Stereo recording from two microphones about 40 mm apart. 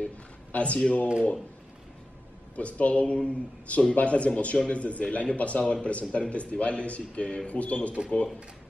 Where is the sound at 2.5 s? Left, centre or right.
Left.